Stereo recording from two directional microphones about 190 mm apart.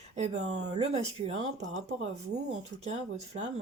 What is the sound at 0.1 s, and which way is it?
A woman's voice, 35° right (ahead or behind).